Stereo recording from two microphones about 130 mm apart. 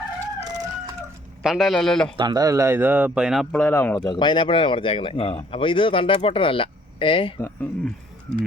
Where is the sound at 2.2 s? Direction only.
30° right (ahead or behind); by 3.4 s 5° right (ahead or behind).